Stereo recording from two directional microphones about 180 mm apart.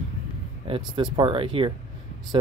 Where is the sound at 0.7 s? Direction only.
25° right (ahead or behind).